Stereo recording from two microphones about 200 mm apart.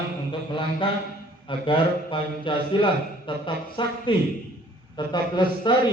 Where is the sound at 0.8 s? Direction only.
25° left (ahead or behind).